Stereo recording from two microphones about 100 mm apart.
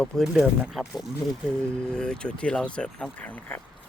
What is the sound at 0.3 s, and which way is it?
Speech, 5° right (ahead or behind).